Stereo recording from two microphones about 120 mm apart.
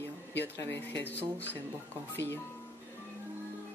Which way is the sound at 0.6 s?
20° left (ahead or behind).